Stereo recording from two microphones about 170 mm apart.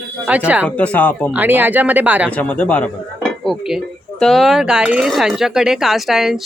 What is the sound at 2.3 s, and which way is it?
Speech, 10° left (ahead or behind).